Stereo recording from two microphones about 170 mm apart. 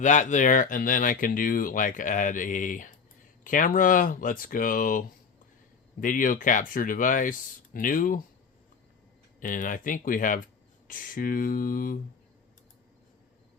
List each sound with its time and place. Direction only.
0.0 s speech: 45° left (ahead or behind)
9.4 s speech: 50° left (ahead or behind)